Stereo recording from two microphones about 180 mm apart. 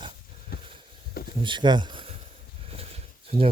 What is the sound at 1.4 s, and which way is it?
Speech, 25° right (ahead or behind).